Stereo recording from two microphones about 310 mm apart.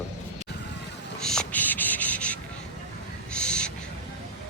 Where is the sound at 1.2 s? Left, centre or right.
Centre.